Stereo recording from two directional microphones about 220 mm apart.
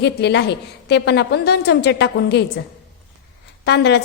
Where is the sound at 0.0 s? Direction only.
50° left (ahead or behind).